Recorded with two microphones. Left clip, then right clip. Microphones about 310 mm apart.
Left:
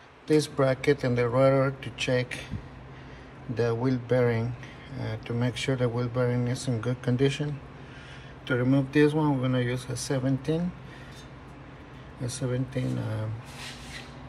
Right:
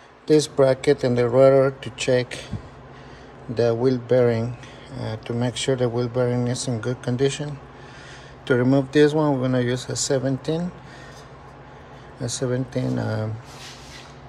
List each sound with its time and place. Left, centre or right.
0.3 s speech: centre
3.5 s speech: centre
12.3 s speech: centre